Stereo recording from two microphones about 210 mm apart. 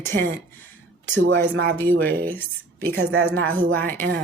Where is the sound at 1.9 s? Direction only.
45° right (ahead or behind).